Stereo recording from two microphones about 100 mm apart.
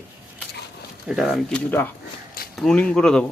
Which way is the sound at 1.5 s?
20° left (ahead or behind).